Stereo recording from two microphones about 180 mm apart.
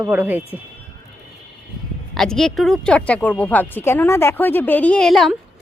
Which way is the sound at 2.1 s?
5° left (ahead or behind).